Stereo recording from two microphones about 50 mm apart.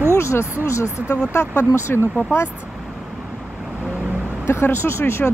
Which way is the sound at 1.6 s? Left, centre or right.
Left.